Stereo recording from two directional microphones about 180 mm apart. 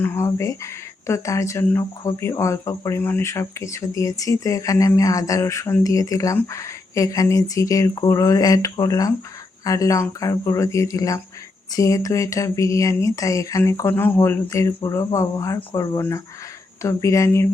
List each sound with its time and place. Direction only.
0.0 s speech: 15° left (ahead or behind)